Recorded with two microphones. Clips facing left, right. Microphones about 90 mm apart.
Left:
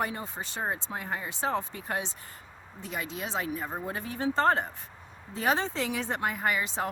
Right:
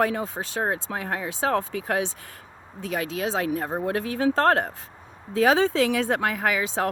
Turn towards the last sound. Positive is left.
turn(degrees=-90)